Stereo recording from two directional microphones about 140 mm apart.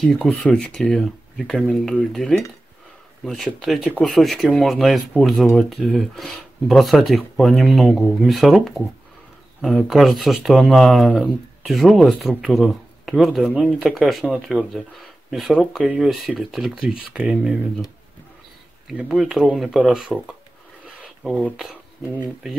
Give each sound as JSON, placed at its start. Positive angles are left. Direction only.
{"t": 0.0, "sound": "speech", "side_deg": 5}
{"t": 18.9, "sound": "speech", "side_deg": -5}
{"t": 20.8, "sound": "a sound", "side_deg": -5}